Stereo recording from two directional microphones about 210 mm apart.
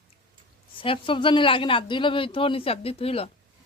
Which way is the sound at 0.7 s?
25° left (ahead or behind).